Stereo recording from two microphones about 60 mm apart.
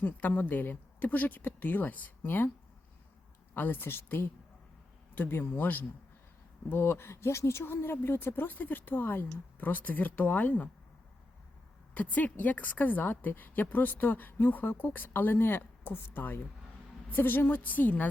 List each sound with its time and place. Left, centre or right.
0.0 s a woman's voice: left
3.5 s a woman's voice: left
11.9 s a woman's voice: left